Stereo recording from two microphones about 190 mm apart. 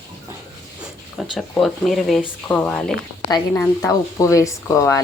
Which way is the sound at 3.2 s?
15° left (ahead or behind).